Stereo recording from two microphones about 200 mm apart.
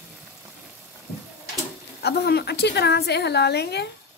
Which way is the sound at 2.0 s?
55° left (ahead or behind).